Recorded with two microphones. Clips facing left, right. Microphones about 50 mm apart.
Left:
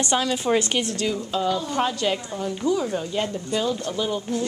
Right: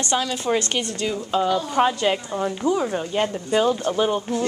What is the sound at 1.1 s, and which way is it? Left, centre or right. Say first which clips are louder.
A woman's voice: right 3 dB; centre.